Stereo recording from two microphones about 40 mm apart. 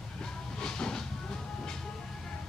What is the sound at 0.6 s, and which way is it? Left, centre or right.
Train, centre.